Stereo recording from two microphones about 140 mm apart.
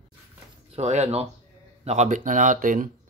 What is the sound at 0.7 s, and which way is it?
Speech, 55° right (ahead or behind).